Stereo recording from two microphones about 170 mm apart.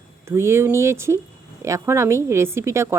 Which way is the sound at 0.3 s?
15° right (ahead or behind).